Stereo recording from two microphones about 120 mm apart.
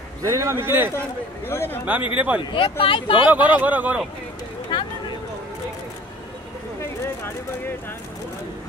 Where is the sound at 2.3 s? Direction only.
45° left (ahead or behind).